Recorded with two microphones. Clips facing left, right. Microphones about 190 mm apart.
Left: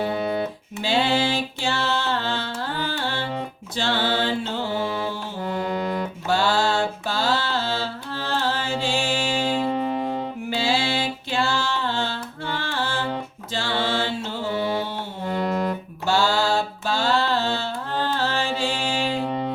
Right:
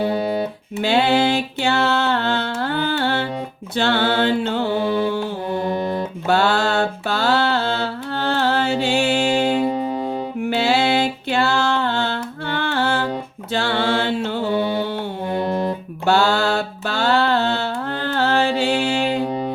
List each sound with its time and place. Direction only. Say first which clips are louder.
0.0 s music: right 4 dB; 20° right (ahead or behind)
0.8 s a sound: right 5 dB; 60° right (ahead or behind)
3.8 s music: right 5 dB; 60° right (ahead or behind)
5.5 s music: right 1 dB; 25° right (ahead or behind)
6.2 s mantra: right 3 dB; 60° right (ahead or behind)
9.6 s music: right 3 dB; 15° right (ahead or behind)
10.5 s music: right 6 dB; 60° right (ahead or behind)
13.5 s mantra: right 5 dB; 60° right (ahead or behind)
14.5 s mantra: right 3 dB; 25° right (ahead or behind)
15.3 s music: right 2 dB; 25° right (ahead or behind)
16.0 s mantra: right 4 dB; 60° right (ahead or behind)
19.2 s music: right 3 dB; 15° right (ahead or behind)